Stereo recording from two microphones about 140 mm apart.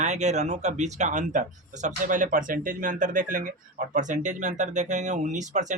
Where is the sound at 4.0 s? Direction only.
60° right (ahead or behind).